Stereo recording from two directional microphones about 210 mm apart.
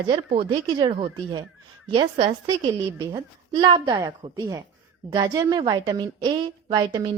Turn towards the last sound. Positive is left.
turn(degrees=-20)  # may be behind; listen again after turning